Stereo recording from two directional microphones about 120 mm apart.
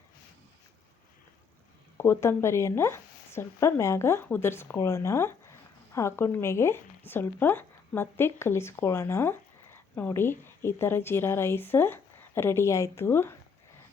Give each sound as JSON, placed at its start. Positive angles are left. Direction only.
{"t": 2.0, "sound": "speech", "side_deg": 20}